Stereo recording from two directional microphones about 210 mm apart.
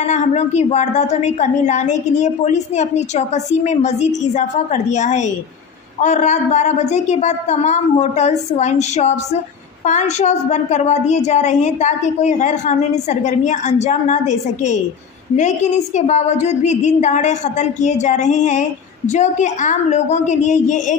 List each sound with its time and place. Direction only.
0.0 s a woman's voice: 35° left (ahead or behind)